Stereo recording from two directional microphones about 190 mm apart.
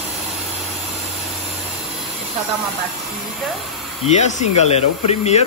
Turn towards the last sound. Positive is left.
turn(degrees=35)  # may be behind; listen again after turning